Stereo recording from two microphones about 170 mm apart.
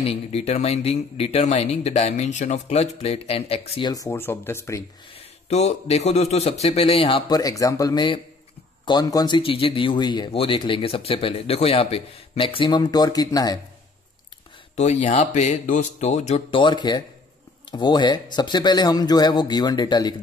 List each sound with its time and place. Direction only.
0.0 s speech: 35° left (ahead or behind)
3.9 s speech: 15° left (ahead or behind)
5.5 s speech: 40° left (ahead or behind); by 13.6 s 20° left (ahead or behind)
14.8 s a man's voice: 40° left (ahead or behind); by 20.2 s 25° left (ahead or behind)